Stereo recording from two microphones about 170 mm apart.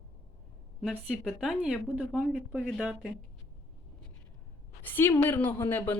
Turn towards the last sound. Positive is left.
turn(degrees=10)  # may be behind; listen again after turning